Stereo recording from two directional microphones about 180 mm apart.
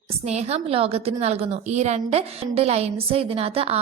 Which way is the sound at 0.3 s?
35° right (ahead or behind).